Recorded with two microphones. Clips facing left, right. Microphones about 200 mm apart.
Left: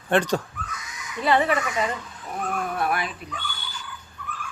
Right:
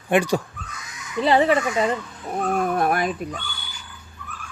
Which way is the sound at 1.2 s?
30° right (ahead or behind).